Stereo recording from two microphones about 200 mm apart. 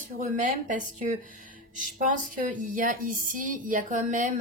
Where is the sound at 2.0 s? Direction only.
40° right (ahead or behind).